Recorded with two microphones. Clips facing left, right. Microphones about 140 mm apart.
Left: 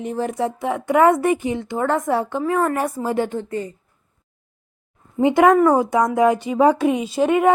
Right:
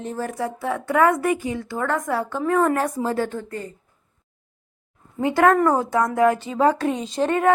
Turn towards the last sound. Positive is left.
turn(degrees=10)  # may be behind; listen again after turning